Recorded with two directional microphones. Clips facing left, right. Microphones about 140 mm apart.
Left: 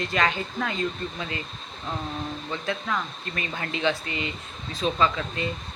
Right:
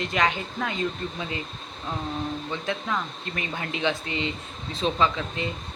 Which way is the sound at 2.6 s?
15° right (ahead or behind).